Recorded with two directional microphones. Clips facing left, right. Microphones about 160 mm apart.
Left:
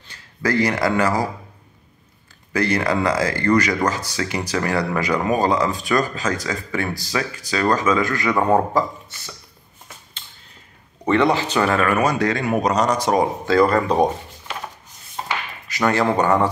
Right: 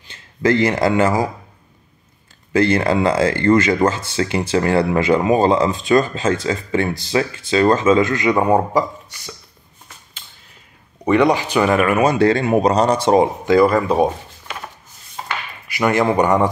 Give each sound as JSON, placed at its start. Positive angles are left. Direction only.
{"t": 0.1, "sound": "speech", "side_deg": -25}
{"t": 2.5, "sound": "speech", "side_deg": -25}
{"t": 11.1, "sound": "speech", "side_deg": -15}
{"t": 13.5, "sound": "speech", "side_deg": -10}
{"t": 15.7, "sound": "speech", "side_deg": -15}